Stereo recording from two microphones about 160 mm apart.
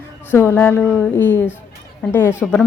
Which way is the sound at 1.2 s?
10° left (ahead or behind).